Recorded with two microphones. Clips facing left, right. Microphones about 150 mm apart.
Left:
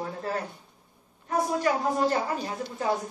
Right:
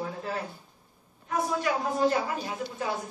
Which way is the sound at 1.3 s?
40° left (ahead or behind).